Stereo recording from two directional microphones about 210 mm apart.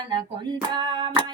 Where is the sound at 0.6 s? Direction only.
20° right (ahead or behind).